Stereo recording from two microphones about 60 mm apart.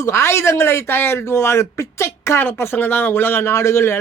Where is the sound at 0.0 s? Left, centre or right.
Left.